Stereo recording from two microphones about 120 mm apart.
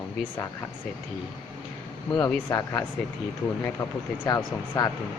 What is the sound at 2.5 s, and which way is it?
Speech, 30° left (ahead or behind).